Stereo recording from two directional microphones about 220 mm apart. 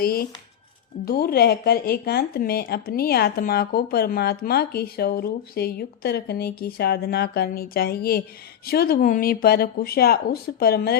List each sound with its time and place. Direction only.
0.0 s speech: 45° left (ahead or behind)